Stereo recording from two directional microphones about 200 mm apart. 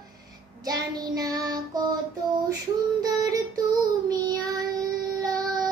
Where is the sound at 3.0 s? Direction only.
15° right (ahead or behind).